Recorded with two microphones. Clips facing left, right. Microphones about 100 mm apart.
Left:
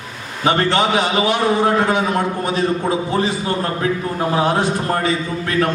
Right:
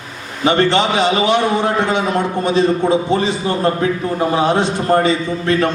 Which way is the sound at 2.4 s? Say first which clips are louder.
Right 5 dB; 25° right (ahead or behind).